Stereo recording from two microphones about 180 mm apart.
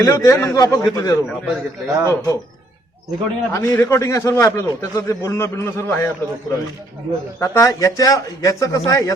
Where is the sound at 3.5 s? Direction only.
20° left (ahead or behind).